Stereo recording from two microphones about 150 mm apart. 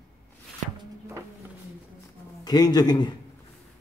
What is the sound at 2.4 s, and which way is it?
Speech, 25° left (ahead or behind).